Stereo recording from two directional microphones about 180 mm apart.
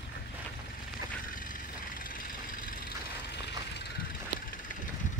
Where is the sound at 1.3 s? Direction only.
50° left (ahead or behind).